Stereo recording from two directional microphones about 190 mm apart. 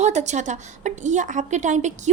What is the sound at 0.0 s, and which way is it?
A woman's voice, 35° right (ahead or behind).